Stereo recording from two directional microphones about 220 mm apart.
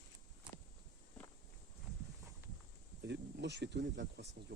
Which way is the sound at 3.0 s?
50° right (ahead or behind).